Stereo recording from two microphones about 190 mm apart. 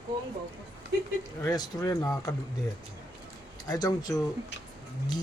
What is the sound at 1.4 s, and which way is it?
Speech, 15° left (ahead or behind).